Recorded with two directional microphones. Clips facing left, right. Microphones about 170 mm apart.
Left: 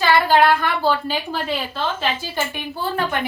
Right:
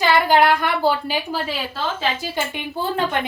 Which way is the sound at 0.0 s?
15° right (ahead or behind).